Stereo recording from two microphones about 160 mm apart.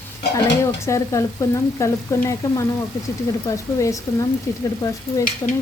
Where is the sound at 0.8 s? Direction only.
20° left (ahead or behind).